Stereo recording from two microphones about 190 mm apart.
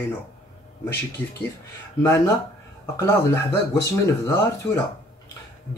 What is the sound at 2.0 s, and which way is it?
Speech, 15° left (ahead or behind).